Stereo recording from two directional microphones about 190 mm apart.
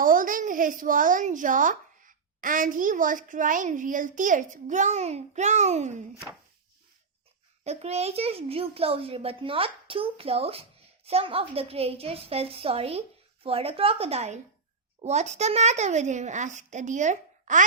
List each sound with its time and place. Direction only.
0.0 s speech: 45° right (ahead or behind)
7.6 s a child's voice: 35° right (ahead or behind)